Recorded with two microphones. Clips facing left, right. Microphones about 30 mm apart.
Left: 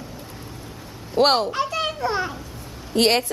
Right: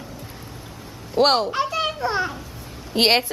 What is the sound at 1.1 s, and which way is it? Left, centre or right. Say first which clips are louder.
A child's voice: even; centre.